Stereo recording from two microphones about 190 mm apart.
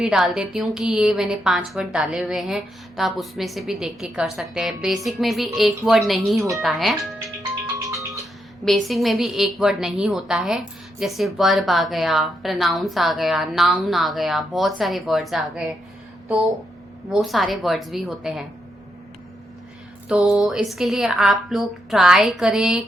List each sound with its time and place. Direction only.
0.0 s a woman's voice: 5° right (ahead or behind)
7.8 s music: 15° right (ahead or behind)
8.6 s a woman's voice: centre (ahead or behind)
20.1 s a woman's voice: 5° right (ahead or behind)